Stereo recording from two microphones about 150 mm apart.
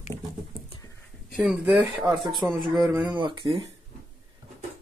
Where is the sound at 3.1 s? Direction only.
30° right (ahead or behind).